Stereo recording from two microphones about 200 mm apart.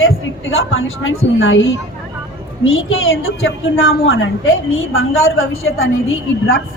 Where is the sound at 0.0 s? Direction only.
80° left.